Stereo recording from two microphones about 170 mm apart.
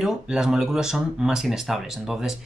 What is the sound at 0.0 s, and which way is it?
Speech, 5° right (ahead or behind).